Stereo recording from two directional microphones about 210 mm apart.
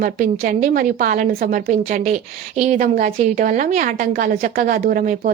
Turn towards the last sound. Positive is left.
turn(degrees=-40)  # may be behind; listen again after turning